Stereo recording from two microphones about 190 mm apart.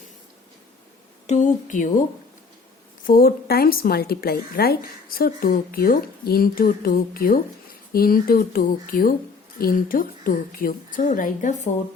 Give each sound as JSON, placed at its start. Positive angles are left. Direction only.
{"t": 1.3, "sound": "speech", "side_deg": 40}
{"t": 3.1, "sound": "speech", "side_deg": 50}